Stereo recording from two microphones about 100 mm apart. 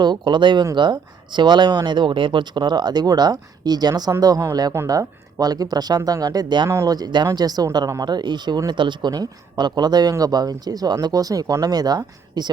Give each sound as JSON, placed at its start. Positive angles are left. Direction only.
{"t": 0.0, "sound": "speech", "side_deg": -50}